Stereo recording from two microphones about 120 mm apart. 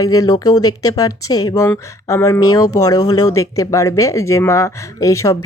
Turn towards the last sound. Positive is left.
turn(degrees=25)  # may be behind; listen again after turning